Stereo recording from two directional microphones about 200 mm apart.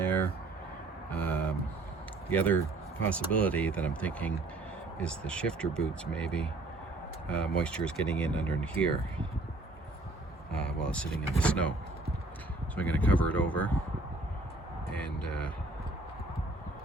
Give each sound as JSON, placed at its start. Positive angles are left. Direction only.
{"t": 0.0, "sound": "a sound", "side_deg": 10}
{"t": 2.3, "sound": "speech", "side_deg": 10}
{"t": 10.5, "sound": "speech", "side_deg": 5}
{"t": 12.7, "sound": "speech", "side_deg": 5}
{"t": 14.9, "sound": "vehicle", "side_deg": 5}